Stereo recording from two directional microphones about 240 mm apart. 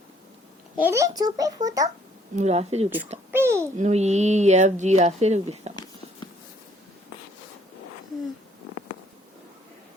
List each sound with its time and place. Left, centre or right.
0.8 s a child's voice: centre
2.3 s speech: right
3.3 s a sound: centre
3.8 s speech: right